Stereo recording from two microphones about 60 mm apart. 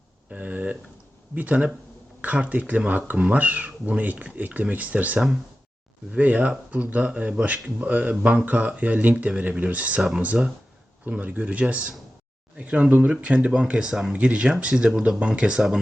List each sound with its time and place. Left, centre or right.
0.3 s a sound: right
1.4 s speech: right
11.1 s speech: right